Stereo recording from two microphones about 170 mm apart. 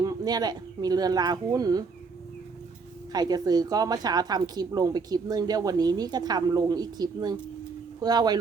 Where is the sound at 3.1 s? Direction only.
25° right (ahead or behind).